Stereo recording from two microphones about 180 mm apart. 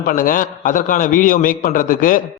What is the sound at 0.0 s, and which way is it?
A man's voice, 50° left (ahead or behind).